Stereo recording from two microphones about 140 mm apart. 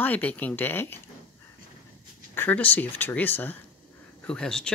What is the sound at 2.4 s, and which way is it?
Speech, 10° left (ahead or behind).